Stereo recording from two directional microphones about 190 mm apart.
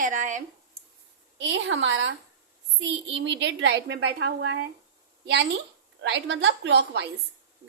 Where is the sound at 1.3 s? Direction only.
75° right (ahead or behind).